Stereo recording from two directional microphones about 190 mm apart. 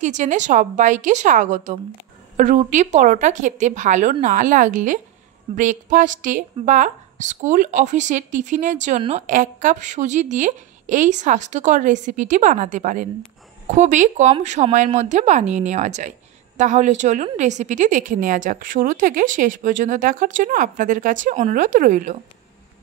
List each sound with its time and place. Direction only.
0.0 s a woman's voice: 40° right (ahead or behind)